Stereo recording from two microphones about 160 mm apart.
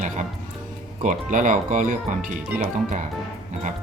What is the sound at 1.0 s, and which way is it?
Speech, 55° right (ahead or behind).